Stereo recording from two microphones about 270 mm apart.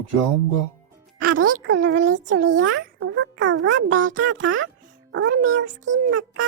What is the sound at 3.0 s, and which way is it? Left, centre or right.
Music, right.